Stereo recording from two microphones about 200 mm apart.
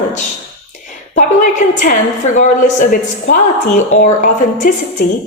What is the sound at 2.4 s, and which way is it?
Speech, 40° left (ahead or behind).